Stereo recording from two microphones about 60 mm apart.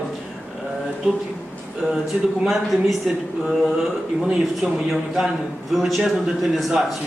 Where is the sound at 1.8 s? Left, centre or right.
Centre.